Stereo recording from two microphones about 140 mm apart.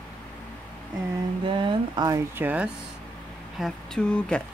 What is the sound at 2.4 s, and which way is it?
Speech, 10° right (ahead or behind).